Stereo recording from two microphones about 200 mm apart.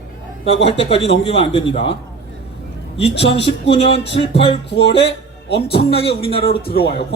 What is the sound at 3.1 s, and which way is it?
Speech, 60° left (ahead or behind).